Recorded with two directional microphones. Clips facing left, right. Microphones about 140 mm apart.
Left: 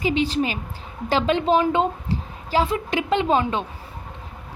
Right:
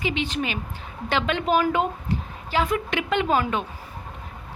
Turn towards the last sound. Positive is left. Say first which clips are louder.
# left 2 dB
turn(degrees=25)  # may be behind; listen again after turning